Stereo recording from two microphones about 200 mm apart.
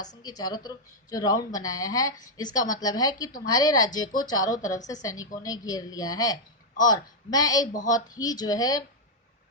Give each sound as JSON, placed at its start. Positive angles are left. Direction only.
{"t": 0.0, "sound": "a woman's voice", "side_deg": 20}